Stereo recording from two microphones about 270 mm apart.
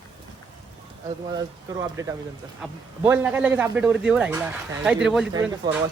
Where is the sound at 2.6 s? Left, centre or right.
Centre.